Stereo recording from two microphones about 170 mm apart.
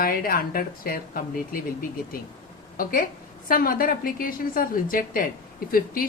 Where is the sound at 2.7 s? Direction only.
55° left (ahead or behind).